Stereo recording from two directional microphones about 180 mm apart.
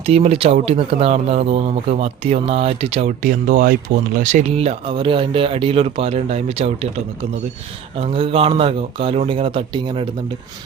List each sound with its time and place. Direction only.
0.0 s speech: 35° right (ahead or behind)
3.2 s speech: 50° right (ahead or behind)
7.9 s speech: 30° right (ahead or behind)